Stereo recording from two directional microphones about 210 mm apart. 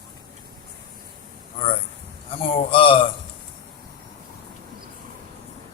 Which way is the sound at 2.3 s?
25° left (ahead or behind).